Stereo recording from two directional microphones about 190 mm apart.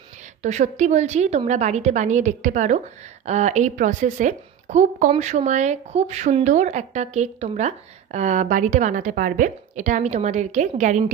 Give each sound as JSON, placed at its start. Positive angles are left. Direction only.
{"t": 0.4, "sound": "a woman's voice", "side_deg": -40}